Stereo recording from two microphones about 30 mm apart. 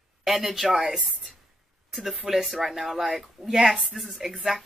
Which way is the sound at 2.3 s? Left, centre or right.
Right.